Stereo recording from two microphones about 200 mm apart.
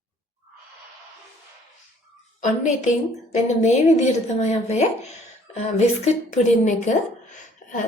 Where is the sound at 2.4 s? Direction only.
35° left (ahead or behind).